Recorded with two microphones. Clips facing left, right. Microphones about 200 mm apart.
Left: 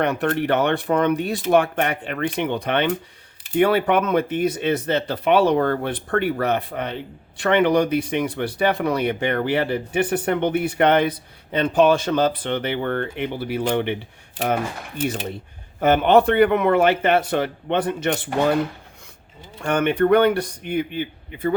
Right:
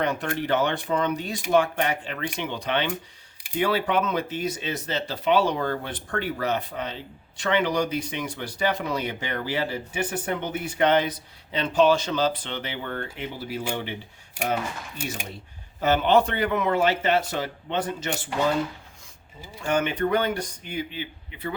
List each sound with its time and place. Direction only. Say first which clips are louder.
0.0 s speech: left 5 dB; 60° left (ahead or behind)
19.6 s speech: left 6 dB; 60° left (ahead or behind)